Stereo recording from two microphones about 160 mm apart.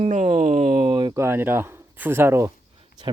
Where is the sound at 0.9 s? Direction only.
25° right (ahead or behind).